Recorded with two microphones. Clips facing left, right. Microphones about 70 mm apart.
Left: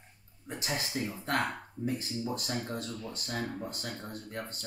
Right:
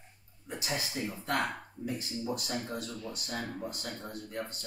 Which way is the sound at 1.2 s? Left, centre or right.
Left.